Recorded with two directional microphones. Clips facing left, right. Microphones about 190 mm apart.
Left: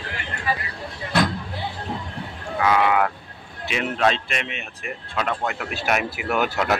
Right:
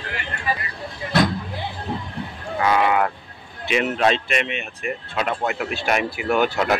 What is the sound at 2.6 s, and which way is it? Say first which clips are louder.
Speech: even; centre (ahead or behind).